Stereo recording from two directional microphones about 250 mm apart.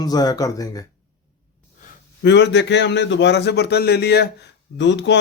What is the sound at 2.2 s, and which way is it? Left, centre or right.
Speech, left.